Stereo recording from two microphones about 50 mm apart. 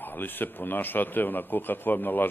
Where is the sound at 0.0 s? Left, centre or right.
Left.